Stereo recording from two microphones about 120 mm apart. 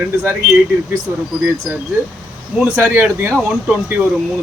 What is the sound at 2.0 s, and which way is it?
A man's voice, 20° right (ahead or behind).